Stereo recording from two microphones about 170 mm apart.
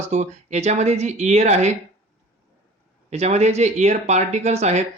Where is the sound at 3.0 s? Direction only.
40° right (ahead or behind).